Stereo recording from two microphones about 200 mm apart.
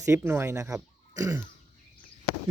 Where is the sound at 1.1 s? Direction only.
15° right (ahead or behind).